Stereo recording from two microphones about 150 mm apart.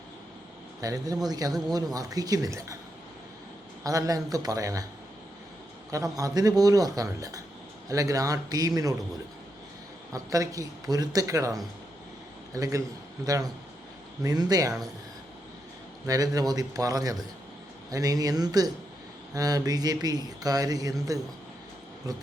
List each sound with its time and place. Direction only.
0.8 s a man's voice: 25° right (ahead or behind)
3.8 s a man's voice: 25° right (ahead or behind)
5.9 s a man's voice: 25° right (ahead or behind)
10.1 s a man's voice: 20° right (ahead or behind)
16.0 s a man's voice: 25° right (ahead or behind)